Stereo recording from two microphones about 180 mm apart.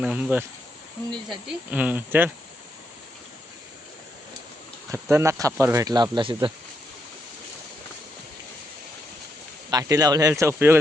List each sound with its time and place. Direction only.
0.0 s speech: 10° right (ahead or behind)
4.9 s speech: 15° right (ahead or behind)
9.6 s speech: 20° right (ahead or behind)